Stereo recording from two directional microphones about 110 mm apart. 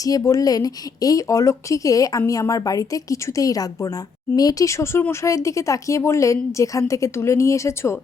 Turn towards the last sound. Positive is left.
turn(degrees=25)  # may be behind; listen again after turning